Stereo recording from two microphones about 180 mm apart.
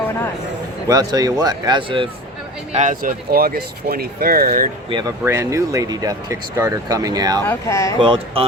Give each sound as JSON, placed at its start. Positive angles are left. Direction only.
{"t": 0.9, "sound": "speech", "side_deg": -20}
{"t": 2.7, "sound": "speech", "side_deg": -45}
{"t": 4.9, "sound": "speech", "side_deg": -25}
{"t": 5.2, "sound": "speech", "side_deg": -15}
{"t": 7.4, "sound": "speech", "side_deg": 15}
{"t": 7.9, "sound": "speech", "side_deg": -30}